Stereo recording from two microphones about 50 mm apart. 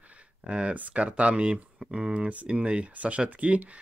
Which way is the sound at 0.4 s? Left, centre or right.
Right.